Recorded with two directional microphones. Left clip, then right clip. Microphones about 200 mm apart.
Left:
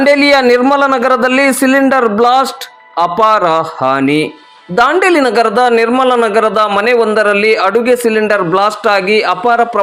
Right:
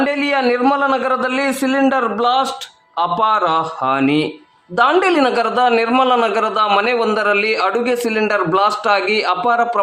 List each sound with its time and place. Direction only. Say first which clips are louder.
0.0 s a man's voice: left 9 dB; 25° left (ahead or behind)
0.4 s a man's voice: left 7 dB; 15° left (ahead or behind)
0.7 s a man's voice: left 6 dB; 25° left (ahead or behind)